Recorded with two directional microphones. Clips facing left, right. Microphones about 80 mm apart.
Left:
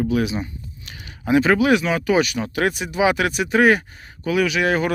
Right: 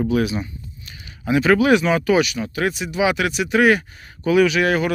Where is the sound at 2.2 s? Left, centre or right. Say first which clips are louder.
Left 1 dB; left.